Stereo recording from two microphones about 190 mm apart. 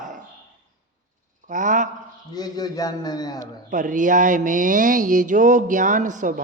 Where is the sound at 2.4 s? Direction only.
20° left (ahead or behind).